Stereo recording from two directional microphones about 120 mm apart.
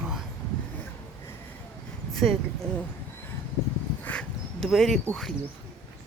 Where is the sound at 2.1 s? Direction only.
Centre (ahead or behind).